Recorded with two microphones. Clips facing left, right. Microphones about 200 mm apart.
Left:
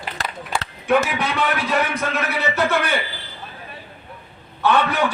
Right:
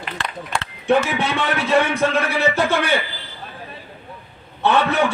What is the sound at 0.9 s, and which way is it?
A man's voice, 25° right (ahead or behind).